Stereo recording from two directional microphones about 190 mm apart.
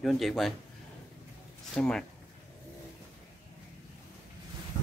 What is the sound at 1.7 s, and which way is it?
Speech, 5° left (ahead or behind).